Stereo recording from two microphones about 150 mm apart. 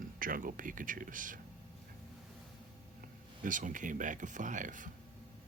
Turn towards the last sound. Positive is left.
turn(degrees=-60)  # may be behind; listen again after turning